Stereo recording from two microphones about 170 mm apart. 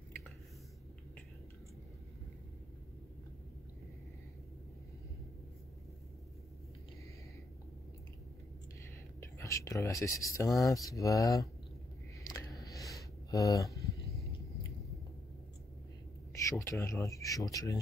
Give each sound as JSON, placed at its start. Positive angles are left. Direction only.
{"t": 9.2, "sound": "speech", "side_deg": 20}
{"t": 12.2, "sound": "a sound", "side_deg": 20}
{"t": 16.4, "sound": "speech", "side_deg": 15}